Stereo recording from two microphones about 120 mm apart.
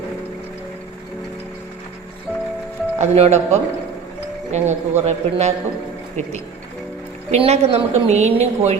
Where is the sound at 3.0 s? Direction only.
70° right (ahead or behind).